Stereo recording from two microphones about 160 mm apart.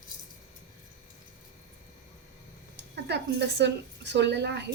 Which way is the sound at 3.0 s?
90° right.